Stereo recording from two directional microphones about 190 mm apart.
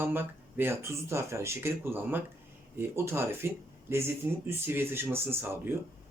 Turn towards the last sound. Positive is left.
turn(degrees=-10)  # may be behind; listen again after turning